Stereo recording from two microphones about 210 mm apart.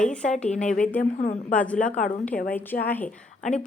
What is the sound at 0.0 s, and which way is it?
A woman's voice, 5° left (ahead or behind).